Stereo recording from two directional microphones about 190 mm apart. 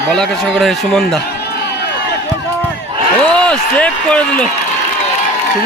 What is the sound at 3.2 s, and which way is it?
A man's voice, 5° left (ahead or behind).